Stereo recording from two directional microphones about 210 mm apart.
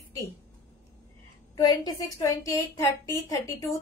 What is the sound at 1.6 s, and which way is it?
A woman's voice, 20° left (ahead or behind).